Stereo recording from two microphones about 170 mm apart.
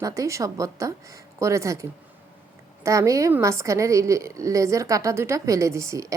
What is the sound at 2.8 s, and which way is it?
A woman's voice, 20° right (ahead or behind).